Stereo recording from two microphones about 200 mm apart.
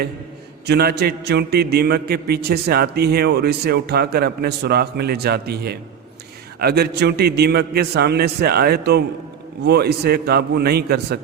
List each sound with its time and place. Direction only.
0.7 s a man's voice: 50° right (ahead or behind)